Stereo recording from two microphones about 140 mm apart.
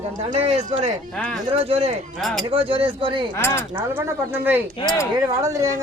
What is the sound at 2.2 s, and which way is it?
Speech, centre (ahead or behind).